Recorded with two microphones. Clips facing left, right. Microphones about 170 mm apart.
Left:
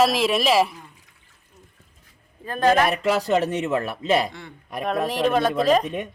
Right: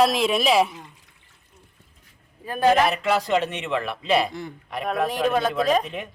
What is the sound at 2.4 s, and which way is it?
Speech, 10° right (ahead or behind).